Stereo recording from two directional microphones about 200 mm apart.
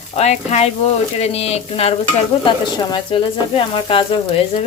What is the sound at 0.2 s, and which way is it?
Speech, 35° left (ahead or behind).